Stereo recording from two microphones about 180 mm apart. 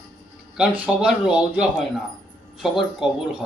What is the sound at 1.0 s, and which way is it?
Speech, 5° right (ahead or behind).